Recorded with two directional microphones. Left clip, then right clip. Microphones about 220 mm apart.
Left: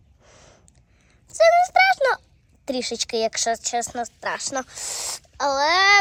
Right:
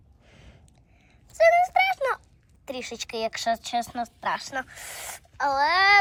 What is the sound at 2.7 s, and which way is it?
A woman's voice, 20° left (ahead or behind).